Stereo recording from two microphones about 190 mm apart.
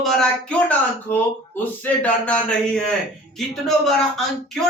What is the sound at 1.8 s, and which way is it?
A man's voice, 5° left (ahead or behind).